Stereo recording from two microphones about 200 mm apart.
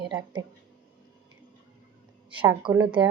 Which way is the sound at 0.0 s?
20° right (ahead or behind).